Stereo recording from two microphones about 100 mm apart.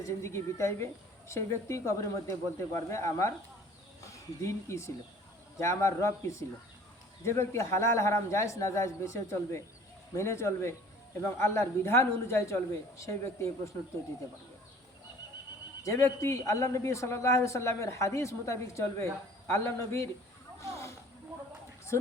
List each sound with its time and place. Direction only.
0.0 s a man's voice: 30° left (ahead or behind)
15.8 s a man's voice: 30° left (ahead or behind)
20.6 s a sound: 30° left (ahead or behind)